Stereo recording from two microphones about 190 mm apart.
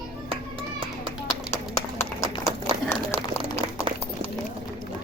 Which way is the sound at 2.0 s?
15° left (ahead or behind).